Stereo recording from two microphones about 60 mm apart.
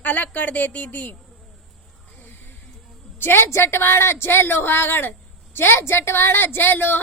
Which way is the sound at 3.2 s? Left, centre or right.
Left.